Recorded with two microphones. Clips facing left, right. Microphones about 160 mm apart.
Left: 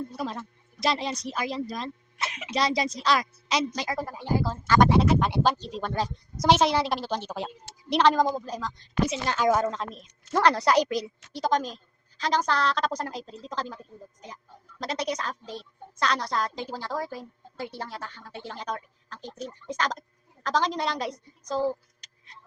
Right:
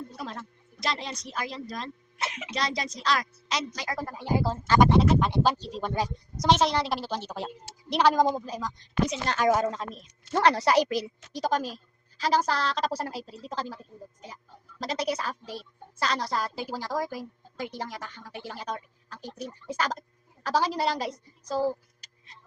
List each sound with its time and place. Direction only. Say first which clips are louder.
0.8 s a woman's voice: left 5 dB; 5° left (ahead or behind)
4.4 s speech: even; 30° right (ahead or behind)
4.9 s a woman's voice: even; centre (ahead or behind)
6.3 s a woman's voice: left 2 dB; centre (ahead or behind)
9.0 s a woman's voice: left 1 dB; 5° left (ahead or behind)
9.5 s a woman's voice: even; 10° right (ahead or behind)
14.8 s a woman's voice: even; centre (ahead or behind)